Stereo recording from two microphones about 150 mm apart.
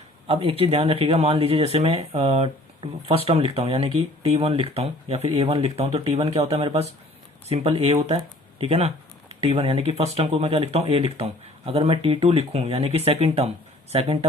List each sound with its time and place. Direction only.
0.3 s speech: 40° right (ahead or behind)